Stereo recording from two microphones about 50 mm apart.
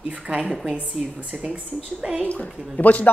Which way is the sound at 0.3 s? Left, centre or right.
Right.